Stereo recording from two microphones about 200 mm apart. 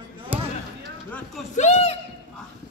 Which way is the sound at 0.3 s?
10° right (ahead or behind).